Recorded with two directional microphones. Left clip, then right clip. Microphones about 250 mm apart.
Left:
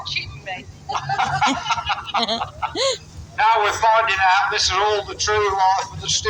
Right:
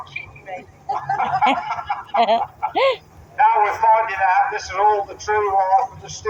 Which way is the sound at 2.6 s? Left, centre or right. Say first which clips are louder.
Right 3 dB; left.